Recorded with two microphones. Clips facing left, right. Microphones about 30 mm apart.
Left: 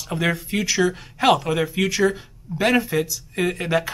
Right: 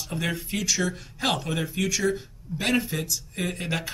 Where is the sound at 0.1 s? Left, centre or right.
Centre.